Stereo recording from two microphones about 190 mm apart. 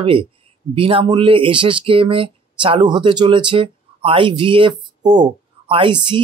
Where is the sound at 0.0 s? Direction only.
25° right (ahead or behind).